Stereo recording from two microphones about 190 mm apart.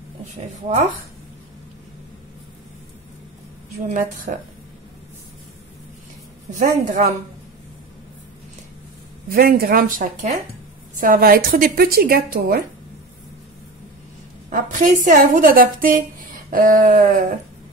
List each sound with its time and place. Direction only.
3.8 s a woman's voice: 45° right (ahead or behind)
6.6 s speech: 40° right (ahead or behind)
9.3 s a woman's voice: 50° right (ahead or behind)
14.5 s a woman's voice: 45° right (ahead or behind)